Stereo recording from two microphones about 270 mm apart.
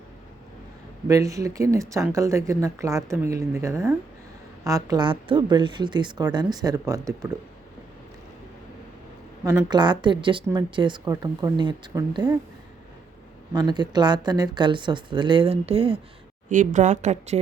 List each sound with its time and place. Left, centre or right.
1.0 s speech: centre
9.4 s speech: centre
13.5 s a woman's voice: centre